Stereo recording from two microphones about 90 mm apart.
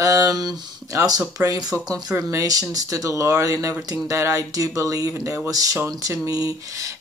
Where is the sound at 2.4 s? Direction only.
40° right (ahead or behind).